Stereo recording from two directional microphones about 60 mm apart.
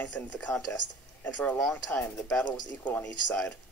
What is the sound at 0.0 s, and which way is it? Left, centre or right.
Speech, left.